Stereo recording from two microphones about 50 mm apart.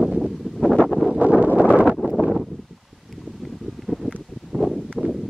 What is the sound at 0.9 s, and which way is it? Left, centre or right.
Wind noise, centre.